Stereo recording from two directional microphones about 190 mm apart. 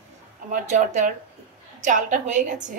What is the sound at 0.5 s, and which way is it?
A woman's voice, 40° right (ahead or behind).